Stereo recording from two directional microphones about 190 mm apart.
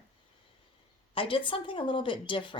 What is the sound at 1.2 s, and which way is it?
A woman's voice, 25° left (ahead or behind).